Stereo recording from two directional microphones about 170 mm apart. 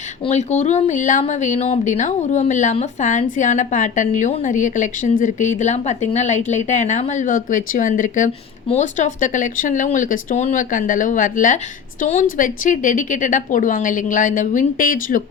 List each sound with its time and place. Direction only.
0.3 s a woman's voice: 45° left (ahead or behind)